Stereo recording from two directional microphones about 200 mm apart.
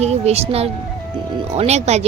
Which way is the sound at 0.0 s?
30° right (ahead or behind).